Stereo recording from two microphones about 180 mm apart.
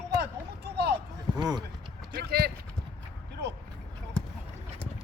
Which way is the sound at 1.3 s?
20° right (ahead or behind).